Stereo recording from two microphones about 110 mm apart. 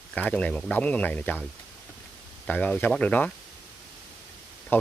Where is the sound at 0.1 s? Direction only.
10° left (ahead or behind).